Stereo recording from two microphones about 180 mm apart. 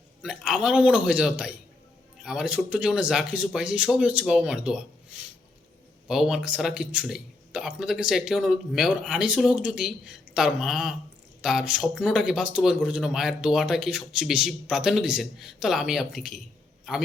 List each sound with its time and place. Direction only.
0.2 s speech: 5° right (ahead or behind)